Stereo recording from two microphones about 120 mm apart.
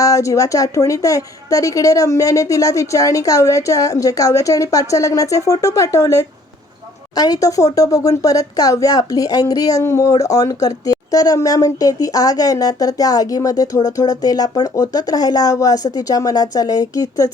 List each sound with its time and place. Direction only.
0.0 s speech: 25° left (ahead or behind)